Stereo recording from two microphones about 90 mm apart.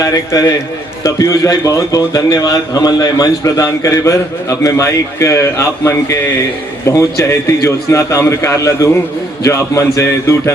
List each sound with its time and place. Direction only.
0.0 s a man's voice: 40° left (ahead or behind)